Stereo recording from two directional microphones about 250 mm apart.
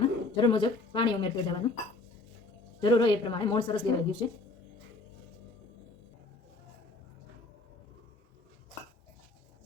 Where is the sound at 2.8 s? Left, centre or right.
Centre.